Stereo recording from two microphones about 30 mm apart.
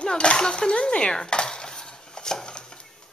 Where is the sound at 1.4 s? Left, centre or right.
Left.